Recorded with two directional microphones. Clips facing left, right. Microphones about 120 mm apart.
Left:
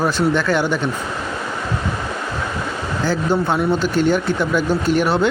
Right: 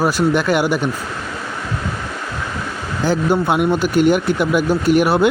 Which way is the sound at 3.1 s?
15° right (ahead or behind).